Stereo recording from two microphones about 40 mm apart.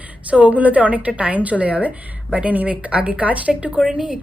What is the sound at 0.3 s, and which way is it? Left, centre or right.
A woman's voice, right.